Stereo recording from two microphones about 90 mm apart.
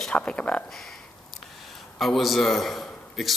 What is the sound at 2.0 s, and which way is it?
A man's voice, centre (ahead or behind).